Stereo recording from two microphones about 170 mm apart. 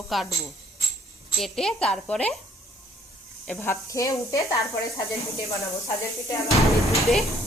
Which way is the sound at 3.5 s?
15° left (ahead or behind).